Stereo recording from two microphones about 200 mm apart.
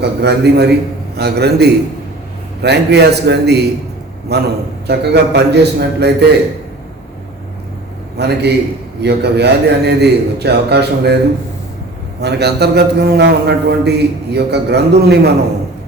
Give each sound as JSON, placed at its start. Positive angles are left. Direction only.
{"t": 0.0, "sound": "a man's voice", "side_deg": -55}
{"t": 8.2, "sound": "a man's voice", "side_deg": -55}
{"t": 12.2, "sound": "a man's voice", "side_deg": -55}